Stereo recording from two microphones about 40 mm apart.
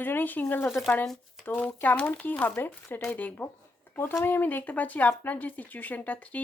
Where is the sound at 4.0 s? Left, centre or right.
Left.